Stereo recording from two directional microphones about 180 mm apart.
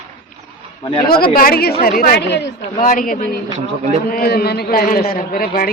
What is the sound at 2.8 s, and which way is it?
A man's voice, 45° left (ahead or behind).